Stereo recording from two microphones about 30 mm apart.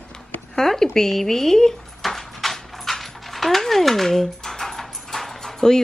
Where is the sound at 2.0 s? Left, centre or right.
Centre.